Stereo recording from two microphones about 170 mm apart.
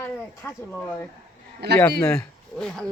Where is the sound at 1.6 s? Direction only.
70° right (ahead or behind).